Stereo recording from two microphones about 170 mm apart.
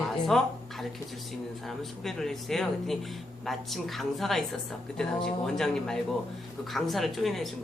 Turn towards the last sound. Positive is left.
turn(degrees=0)  # may be behind; listen again after turning